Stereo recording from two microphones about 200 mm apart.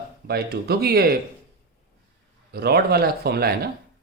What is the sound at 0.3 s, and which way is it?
Speech, 55° right (ahead or behind).